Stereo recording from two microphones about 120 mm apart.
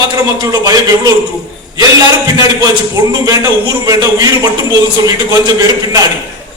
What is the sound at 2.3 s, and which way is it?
A man's voice, 30° right (ahead or behind).